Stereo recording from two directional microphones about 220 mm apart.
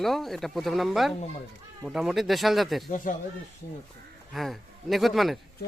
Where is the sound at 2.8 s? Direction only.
35° left (ahead or behind).